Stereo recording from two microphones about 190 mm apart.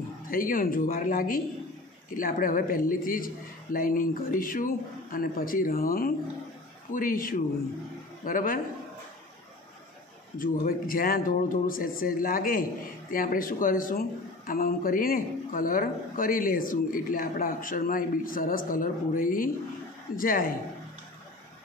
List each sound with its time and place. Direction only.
0.3 s speech: 45° left (ahead or behind)
10.4 s speech: 45° left (ahead or behind)